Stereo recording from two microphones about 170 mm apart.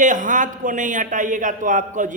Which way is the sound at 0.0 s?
50° right (ahead or behind).